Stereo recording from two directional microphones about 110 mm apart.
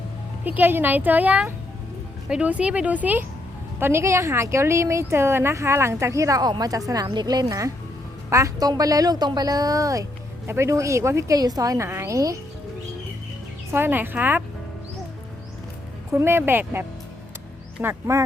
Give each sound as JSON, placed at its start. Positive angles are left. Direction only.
{"t": 0.4, "sound": "a woman's voice", "side_deg": -15}
{"t": 13.7, "sound": "a woman's voice", "side_deg": -20}
{"t": 16.1, "sound": "a woman's voice", "side_deg": -20}